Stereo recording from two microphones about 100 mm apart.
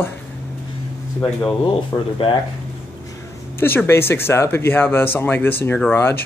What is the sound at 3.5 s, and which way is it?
Speech, 20° left (ahead or behind).